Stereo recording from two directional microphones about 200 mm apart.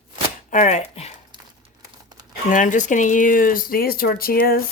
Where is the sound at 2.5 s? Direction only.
40° left (ahead or behind).